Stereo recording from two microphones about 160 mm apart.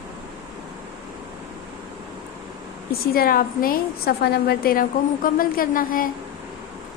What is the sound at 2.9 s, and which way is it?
A woman's voice, 65° left (ahead or behind).